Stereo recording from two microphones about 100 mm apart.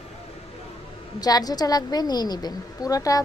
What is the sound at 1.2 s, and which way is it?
A woman's voice, 40° left (ahead or behind).